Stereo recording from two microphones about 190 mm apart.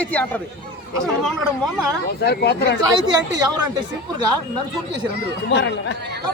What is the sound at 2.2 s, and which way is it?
Speech, 60° left (ahead or behind).